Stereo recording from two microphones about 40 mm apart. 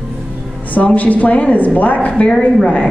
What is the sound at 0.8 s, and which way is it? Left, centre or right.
Speech, left.